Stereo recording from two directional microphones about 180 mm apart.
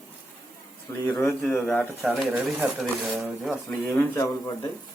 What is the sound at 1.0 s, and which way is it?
Speech, 15° left (ahead or behind).